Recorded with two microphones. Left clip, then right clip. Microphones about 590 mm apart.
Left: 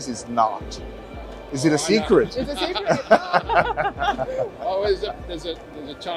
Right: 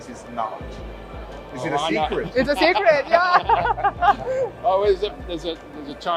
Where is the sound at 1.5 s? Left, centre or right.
Left.